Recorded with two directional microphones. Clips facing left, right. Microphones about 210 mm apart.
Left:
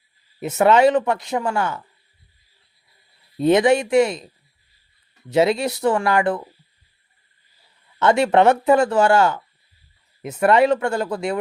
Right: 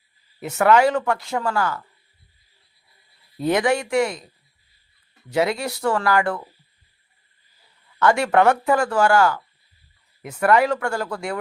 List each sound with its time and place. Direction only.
0.3 s speech: 20° left (ahead or behind)
3.3 s speech: 20° left (ahead or behind)
5.3 s speech: 25° left (ahead or behind)
7.9 s speech: 20° left (ahead or behind)